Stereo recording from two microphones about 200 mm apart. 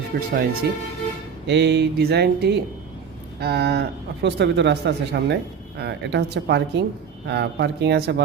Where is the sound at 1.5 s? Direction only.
60° right (ahead or behind).